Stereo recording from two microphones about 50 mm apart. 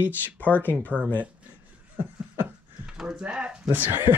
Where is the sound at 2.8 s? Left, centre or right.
Centre.